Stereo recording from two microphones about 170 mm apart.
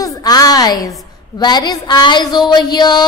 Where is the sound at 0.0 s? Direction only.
20° left (ahead or behind).